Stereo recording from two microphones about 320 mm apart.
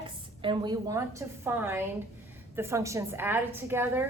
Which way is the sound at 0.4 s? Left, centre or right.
Centre.